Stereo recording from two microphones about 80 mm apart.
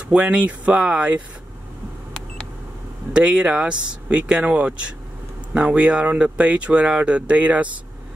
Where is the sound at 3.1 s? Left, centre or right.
Centre.